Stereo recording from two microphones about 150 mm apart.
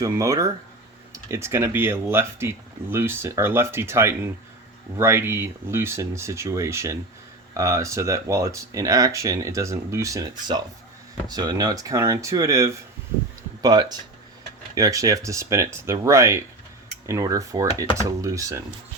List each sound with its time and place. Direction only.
0.0 s speech: 20° right (ahead or behind)